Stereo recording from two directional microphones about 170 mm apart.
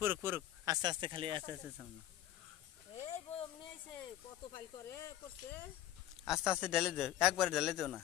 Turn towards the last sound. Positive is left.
turn(degrees=0)  # may be behind; listen again after turning